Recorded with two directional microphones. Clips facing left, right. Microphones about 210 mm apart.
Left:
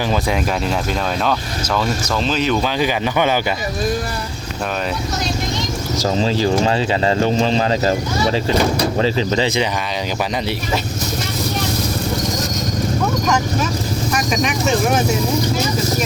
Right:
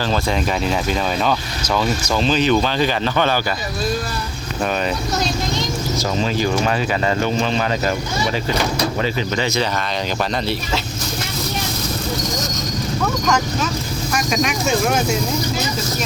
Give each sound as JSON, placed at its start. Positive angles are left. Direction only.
{"t": 1.2, "sound": "speech", "side_deg": 0}
{"t": 6.0, "sound": "speech", "side_deg": 30}
{"t": 9.0, "sound": "speech", "side_deg": 30}